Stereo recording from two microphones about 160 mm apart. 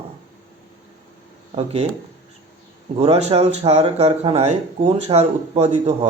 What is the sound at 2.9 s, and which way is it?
Speech, 40° right (ahead or behind).